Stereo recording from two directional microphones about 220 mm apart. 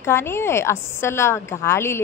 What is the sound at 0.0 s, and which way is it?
A woman's voice, 10° left (ahead or behind).